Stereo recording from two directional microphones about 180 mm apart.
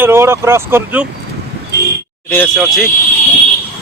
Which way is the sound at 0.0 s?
15° right (ahead or behind).